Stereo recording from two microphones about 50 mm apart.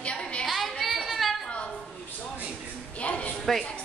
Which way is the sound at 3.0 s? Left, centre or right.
Left.